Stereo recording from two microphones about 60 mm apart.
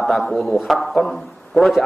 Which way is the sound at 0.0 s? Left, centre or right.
Centre.